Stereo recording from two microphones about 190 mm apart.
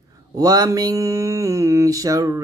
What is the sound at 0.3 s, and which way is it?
Mantra, 20° right (ahead or behind).